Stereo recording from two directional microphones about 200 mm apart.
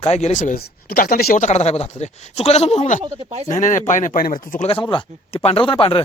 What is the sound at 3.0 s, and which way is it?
Speech, 25° right (ahead or behind).